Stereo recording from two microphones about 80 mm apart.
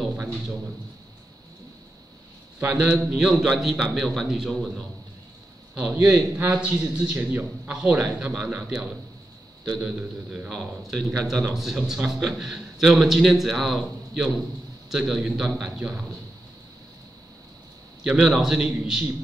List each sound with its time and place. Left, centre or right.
2.7 s a man's voice: centre
6.1 s a man's voice: right
8.0 s a man's voice: centre
18.0 s a man's voice: centre